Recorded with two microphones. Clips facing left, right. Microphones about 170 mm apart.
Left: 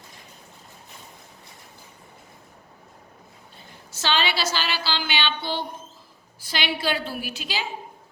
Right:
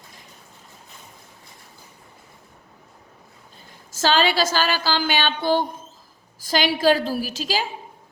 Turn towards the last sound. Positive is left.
turn(degrees=-40)  # may be behind; listen again after turning